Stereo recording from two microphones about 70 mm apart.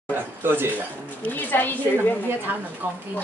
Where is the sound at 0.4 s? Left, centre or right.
Right.